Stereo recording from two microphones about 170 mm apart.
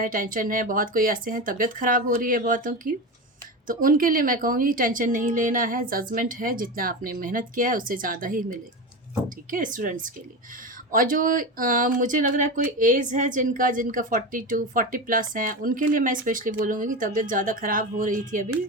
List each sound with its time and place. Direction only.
0.0 s a woman's voice: 55° right (ahead or behind)